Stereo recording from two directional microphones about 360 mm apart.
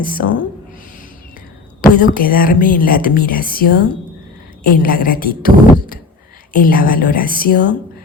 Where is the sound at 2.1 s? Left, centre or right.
Left.